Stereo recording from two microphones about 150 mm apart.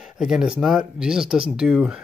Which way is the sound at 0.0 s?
5° right (ahead or behind).